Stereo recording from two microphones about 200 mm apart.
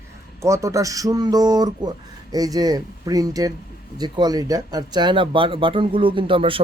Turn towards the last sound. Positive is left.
turn(degrees=-25)  # may be behind; listen again after turning